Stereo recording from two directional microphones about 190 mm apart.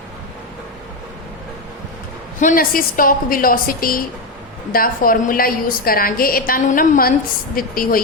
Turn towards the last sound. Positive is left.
turn(degrees=50)  # may be behind; listen again after turning